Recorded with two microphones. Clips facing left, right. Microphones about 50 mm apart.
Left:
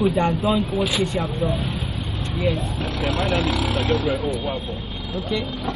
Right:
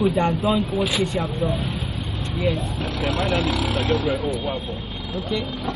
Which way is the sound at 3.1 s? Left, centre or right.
Left.